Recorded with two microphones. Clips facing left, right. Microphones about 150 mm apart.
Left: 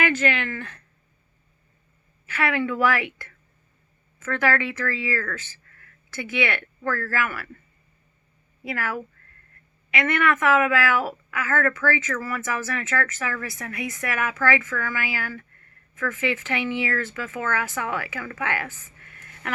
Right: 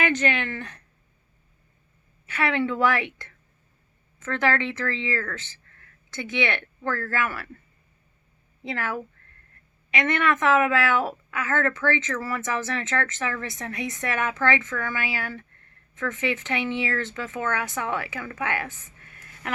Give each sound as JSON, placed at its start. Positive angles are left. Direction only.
{"t": 0.0, "sound": "speech", "side_deg": -20}
{"t": 2.2, "sound": "a woman's voice", "side_deg": -20}
{"t": 4.2, "sound": "a woman's voice", "side_deg": -20}
{"t": 8.6, "sound": "a woman's voice", "side_deg": -20}